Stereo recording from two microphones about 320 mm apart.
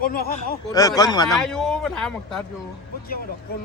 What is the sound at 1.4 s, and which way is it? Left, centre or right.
Speech, centre.